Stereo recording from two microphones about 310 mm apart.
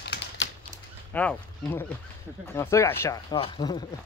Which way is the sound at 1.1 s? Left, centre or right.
Centre.